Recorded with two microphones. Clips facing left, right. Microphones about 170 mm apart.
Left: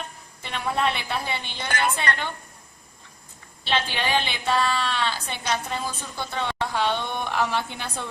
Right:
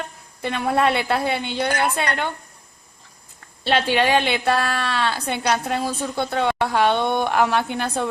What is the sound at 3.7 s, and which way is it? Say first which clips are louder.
A woman's voice: right 7 dB; 70° right (ahead or behind).